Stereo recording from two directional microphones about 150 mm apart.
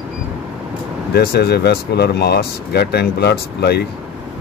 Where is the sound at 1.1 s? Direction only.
90° left.